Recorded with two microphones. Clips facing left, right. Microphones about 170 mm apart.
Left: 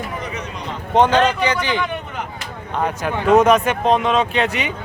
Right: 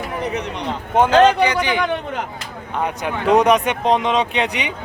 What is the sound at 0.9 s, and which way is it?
Speech, 10° right (ahead or behind).